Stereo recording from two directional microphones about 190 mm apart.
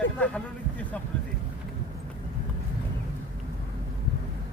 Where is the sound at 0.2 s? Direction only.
5° left (ahead or behind).